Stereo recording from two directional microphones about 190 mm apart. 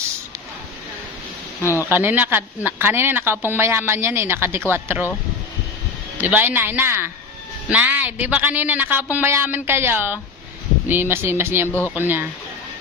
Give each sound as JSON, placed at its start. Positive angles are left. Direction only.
{"t": 1.6, "sound": "speech", "side_deg": 15}
{"t": 1.9, "sound": "speech", "side_deg": -10}
{"t": 6.1, "sound": "speech", "side_deg": -10}